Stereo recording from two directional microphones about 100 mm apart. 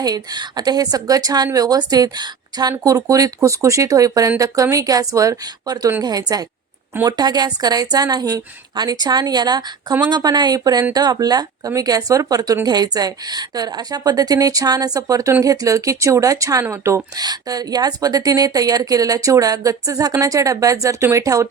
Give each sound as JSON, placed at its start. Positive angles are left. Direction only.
{"t": 0.0, "sound": "a woman's voice", "side_deg": -40}
{"t": 17.2, "sound": "a woman's voice", "side_deg": -40}